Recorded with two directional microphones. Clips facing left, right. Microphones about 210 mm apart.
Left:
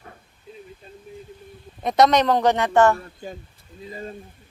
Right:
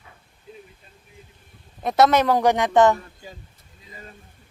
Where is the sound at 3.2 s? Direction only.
50° left (ahead or behind).